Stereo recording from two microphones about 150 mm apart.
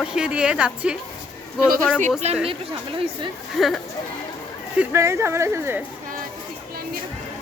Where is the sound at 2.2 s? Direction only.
45° right (ahead or behind).